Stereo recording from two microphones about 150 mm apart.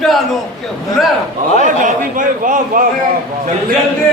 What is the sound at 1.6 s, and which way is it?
Speech, 60° right (ahead or behind).